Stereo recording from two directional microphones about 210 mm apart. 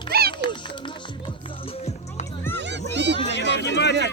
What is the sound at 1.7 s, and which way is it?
Music, 30° left (ahead or behind).